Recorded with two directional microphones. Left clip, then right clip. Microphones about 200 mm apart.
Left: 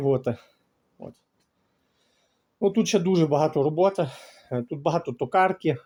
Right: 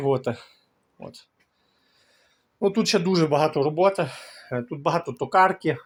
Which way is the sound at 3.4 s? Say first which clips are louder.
Right 1 dB; 25° left (ahead or behind).